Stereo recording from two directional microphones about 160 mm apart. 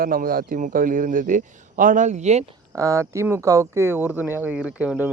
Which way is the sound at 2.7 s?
20° right (ahead or behind).